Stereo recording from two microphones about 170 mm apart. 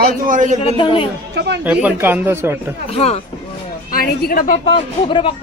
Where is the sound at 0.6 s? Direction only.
35° left (ahead or behind).